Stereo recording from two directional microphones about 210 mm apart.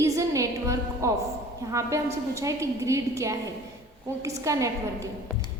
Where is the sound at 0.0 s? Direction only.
15° right (ahead or behind).